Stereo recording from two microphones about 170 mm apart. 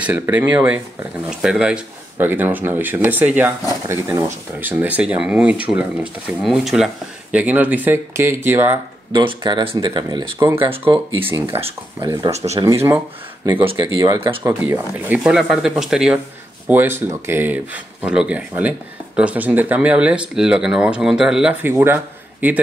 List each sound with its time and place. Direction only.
0.0 s speech: 10° right (ahead or behind)
9.1 s speech: 25° right (ahead or behind)
12.0 s speech: 25° right (ahead or behind)
12.3 s speech: 40° right (ahead or behind)
12.5 s speech: 20° right (ahead or behind)
13.6 s speech: 30° right (ahead or behind); by 22.6 s 10° right (ahead or behind)